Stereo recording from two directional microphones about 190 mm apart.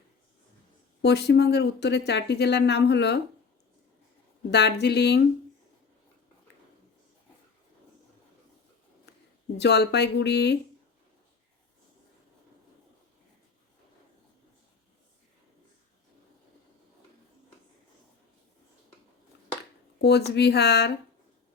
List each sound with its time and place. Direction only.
1.0 s speech: 60° left (ahead or behind)
4.5 s speech: 60° left (ahead or behind)
9.1 s a sound: 65° left (ahead or behind)
9.6 s speech: 60° left (ahead or behind)
20.0 s speech: 60° left (ahead or behind)